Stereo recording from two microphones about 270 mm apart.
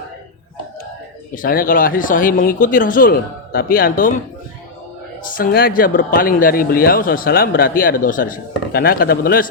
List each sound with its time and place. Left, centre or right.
1.4 s speech: left
5.3 s speech: left